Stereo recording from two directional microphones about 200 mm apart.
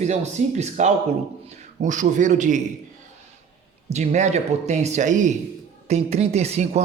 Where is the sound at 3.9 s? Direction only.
35° right (ahead or behind).